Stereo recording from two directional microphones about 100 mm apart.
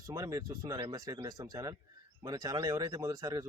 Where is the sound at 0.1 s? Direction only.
35° right (ahead or behind).